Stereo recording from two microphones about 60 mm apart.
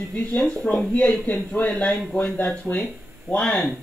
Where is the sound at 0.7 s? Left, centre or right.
Centre.